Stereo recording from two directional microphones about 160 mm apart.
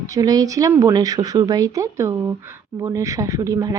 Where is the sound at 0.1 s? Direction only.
25° right (ahead or behind).